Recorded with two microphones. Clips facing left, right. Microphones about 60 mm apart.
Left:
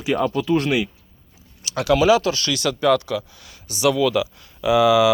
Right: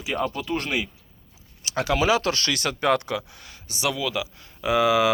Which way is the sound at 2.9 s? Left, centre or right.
Right.